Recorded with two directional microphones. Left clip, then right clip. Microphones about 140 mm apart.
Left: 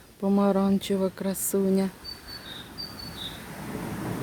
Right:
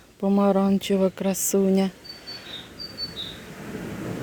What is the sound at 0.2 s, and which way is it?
Speech, 15° right (ahead or behind).